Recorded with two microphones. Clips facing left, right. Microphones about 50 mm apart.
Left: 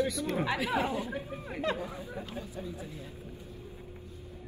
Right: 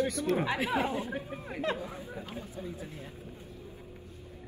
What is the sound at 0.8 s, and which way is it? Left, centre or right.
Speech, right.